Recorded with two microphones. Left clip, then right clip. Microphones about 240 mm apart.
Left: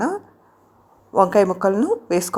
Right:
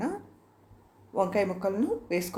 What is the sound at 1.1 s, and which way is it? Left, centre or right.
A woman's voice, left.